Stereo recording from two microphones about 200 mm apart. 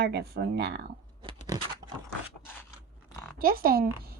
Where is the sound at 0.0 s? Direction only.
55° right (ahead or behind).